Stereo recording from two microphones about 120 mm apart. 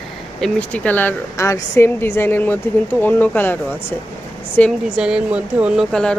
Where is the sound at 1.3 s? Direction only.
25° left (ahead or behind).